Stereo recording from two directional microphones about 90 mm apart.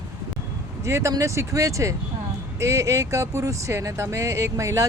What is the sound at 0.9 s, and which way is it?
Speech, 30° right (ahead or behind).